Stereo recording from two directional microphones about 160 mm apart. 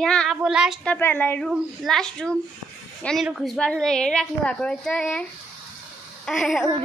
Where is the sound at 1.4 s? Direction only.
Centre (ahead or behind).